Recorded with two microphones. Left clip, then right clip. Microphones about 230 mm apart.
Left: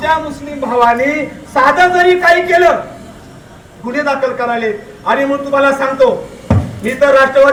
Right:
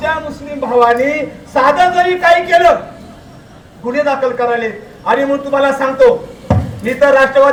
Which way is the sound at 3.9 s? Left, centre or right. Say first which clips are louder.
Right 1 dB; right.